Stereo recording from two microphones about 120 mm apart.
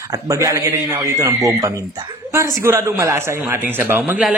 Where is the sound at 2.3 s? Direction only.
25° right (ahead or behind).